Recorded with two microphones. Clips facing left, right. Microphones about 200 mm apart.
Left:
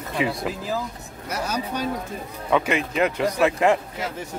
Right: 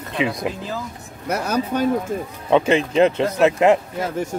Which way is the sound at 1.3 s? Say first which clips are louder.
Right 6 dB; 55° right (ahead or behind).